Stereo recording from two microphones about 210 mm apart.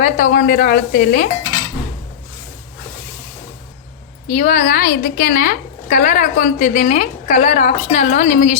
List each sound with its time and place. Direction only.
0.0 s a woman's voice: 40° left (ahead or behind)
4.3 s a woman's voice: 35° left (ahead or behind)